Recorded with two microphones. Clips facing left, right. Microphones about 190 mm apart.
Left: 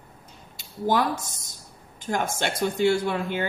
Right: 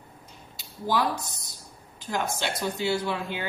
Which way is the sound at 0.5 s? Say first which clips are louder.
Left 3 dB; 50° left (ahead or behind).